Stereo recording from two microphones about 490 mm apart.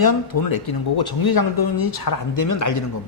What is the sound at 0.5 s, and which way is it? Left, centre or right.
Speech, left.